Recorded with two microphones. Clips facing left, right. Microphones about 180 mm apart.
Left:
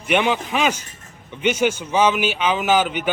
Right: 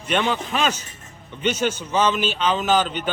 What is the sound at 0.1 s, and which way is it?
A man's voice, 15° left (ahead or behind).